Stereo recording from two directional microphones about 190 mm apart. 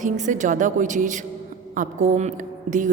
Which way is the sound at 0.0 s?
40° right (ahead or behind).